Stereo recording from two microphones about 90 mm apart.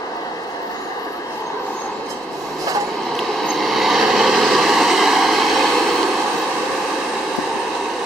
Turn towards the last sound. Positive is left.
turn(degrees=0)  # may be behind; listen again after turning